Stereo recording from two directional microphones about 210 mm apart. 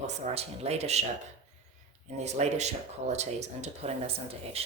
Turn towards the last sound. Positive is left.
turn(degrees=-30)  # may be behind; listen again after turning